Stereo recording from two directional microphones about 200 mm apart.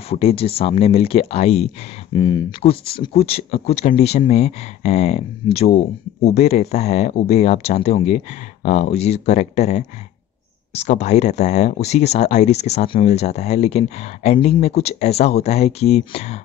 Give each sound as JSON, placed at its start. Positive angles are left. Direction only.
{"t": 0.1, "sound": "speech", "side_deg": 30}